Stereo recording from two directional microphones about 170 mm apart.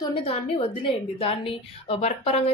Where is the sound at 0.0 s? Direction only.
35° left (ahead or behind).